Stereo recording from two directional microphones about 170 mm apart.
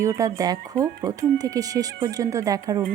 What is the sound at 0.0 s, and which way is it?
Speech, 20° right (ahead or behind).